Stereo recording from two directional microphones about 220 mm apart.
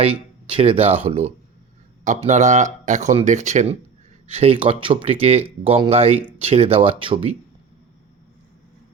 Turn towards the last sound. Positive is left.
turn(degrees=-25)  # may be behind; listen again after turning